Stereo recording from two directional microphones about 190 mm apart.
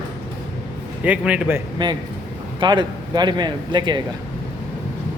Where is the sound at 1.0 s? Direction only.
5° right (ahead or behind).